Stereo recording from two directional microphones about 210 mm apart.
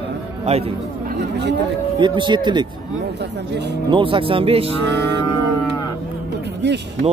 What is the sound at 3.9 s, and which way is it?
Speech, 25° right (ahead or behind).